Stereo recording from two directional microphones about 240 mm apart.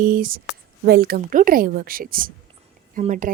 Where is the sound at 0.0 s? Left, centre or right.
Right.